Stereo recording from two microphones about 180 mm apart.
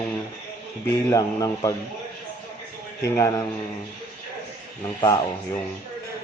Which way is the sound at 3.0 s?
20° left (ahead or behind).